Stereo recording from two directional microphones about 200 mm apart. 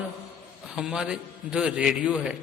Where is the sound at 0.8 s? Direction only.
5° right (ahead or behind).